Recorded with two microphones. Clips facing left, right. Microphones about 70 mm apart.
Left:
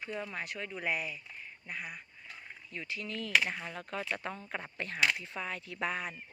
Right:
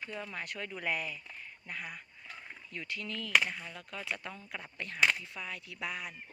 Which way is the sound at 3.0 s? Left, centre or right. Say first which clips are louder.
Right 1 dB; left.